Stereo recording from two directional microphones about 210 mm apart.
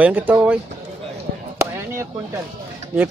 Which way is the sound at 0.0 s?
10° right (ahead or behind).